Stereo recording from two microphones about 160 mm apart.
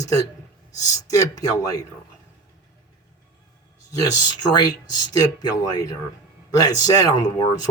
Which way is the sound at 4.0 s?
25° left (ahead or behind).